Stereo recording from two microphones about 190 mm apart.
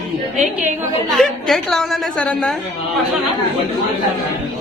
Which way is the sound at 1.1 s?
Centre (ahead or behind).